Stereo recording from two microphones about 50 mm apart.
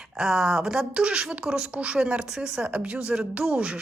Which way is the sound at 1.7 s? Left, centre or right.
Right.